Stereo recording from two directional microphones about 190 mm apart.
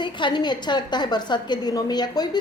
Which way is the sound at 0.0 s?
25° left (ahead or behind).